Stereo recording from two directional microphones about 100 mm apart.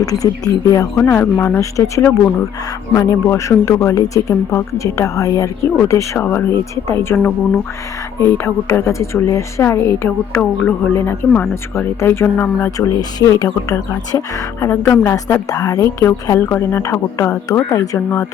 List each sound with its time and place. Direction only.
0.0 s a woman's voice: 35° left (ahead or behind); by 12.7 s 20° left (ahead or behind)
12.7 s a woman's voice: 40° left (ahead or behind)
15.4 s a woman's voice: 35° left (ahead or behind)